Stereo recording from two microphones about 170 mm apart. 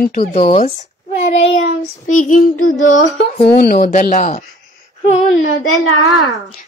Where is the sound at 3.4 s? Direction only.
65° left (ahead or behind).